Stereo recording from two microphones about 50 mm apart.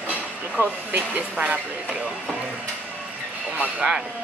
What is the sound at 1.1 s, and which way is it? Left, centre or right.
Speech, right.